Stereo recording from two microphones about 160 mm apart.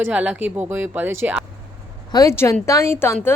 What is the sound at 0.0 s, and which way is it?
Speech, 10° right (ahead or behind).